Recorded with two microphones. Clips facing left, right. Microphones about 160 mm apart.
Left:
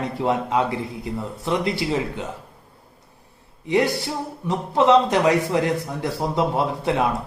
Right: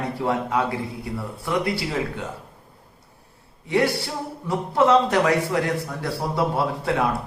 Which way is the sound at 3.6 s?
20° left (ahead or behind).